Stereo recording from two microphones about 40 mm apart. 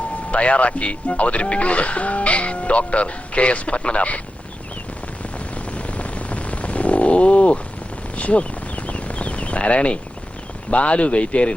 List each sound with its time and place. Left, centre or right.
0.3 s speech: left
5.7 s a sound: left
10.7 s speech: left